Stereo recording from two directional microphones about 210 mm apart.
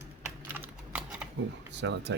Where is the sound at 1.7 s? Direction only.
55° right (ahead or behind).